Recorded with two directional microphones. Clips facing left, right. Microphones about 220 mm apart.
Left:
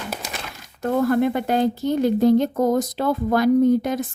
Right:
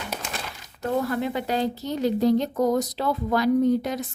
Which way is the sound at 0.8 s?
50° left (ahead or behind).